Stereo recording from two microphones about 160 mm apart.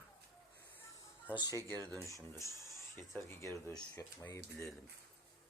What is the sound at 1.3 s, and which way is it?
Speech, 25° left (ahead or behind).